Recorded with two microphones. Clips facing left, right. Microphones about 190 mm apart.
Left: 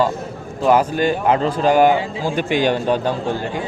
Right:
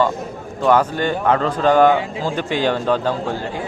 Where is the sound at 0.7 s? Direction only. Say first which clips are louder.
Left 1 dB; 15° left (ahead or behind).